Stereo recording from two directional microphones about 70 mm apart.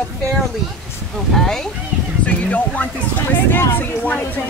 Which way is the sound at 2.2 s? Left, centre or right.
Left.